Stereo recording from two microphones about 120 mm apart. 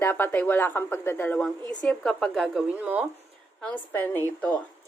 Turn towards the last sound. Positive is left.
turn(degrees=15)  # may be behind; listen again after turning